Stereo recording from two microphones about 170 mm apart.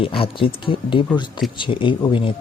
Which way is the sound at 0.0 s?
30° left (ahead or behind).